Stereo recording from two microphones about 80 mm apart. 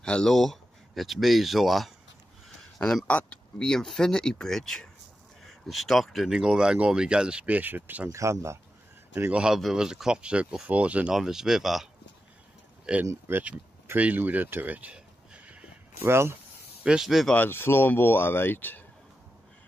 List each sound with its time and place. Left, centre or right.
0.0 s speech: centre; by 8.1 s right
8.1 s speech: right
9.3 s speech: centre
11.1 s speech: centre
13.0 s speech: right
13.9 s a sound: right
16.0 s speech: right
16.8 s speech: centre
17.5 s speech: left